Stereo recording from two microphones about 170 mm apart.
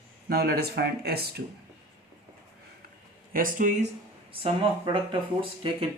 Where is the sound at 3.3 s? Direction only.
50° right (ahead or behind).